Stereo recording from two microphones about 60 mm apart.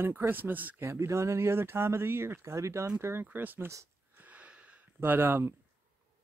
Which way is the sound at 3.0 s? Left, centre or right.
Right.